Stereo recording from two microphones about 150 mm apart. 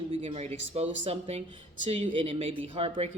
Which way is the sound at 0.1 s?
45° right (ahead or behind).